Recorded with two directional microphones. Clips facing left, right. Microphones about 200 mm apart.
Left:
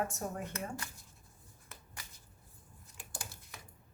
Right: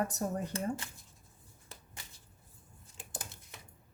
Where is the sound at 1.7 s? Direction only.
30° right (ahead or behind).